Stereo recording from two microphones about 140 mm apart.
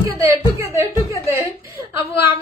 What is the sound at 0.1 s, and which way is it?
Speech, 25° right (ahead or behind).